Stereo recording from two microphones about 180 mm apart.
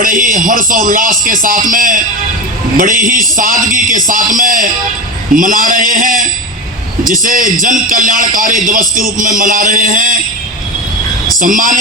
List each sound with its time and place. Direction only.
0.0 s a man's voice: 50° right (ahead or behind)
11.3 s a man's voice: 45° right (ahead or behind)